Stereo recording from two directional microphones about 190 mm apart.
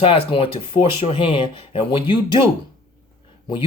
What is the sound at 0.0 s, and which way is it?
Speech, 25° left (ahead or behind).